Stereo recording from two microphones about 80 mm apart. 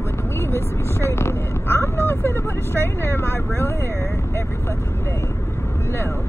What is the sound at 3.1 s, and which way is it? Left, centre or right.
Speech, left.